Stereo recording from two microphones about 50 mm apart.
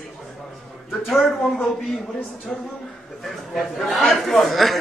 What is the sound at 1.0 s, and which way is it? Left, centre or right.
Speech, centre.